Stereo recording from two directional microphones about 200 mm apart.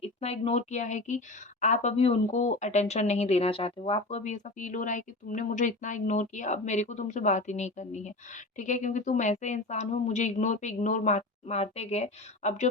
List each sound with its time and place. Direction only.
0.0 s speech: 30° left (ahead or behind)